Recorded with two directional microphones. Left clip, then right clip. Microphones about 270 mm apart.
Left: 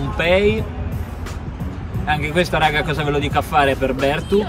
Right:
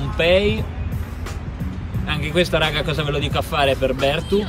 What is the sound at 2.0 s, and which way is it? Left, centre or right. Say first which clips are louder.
Speech: left 2 dB; centre.